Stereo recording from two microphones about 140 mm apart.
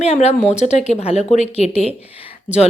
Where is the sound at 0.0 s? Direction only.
50° left (ahead or behind).